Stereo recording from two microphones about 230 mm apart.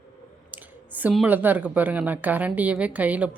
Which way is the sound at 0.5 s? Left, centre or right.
Centre.